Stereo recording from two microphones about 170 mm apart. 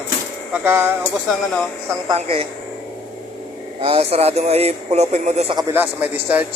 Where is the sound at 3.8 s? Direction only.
35° right (ahead or behind).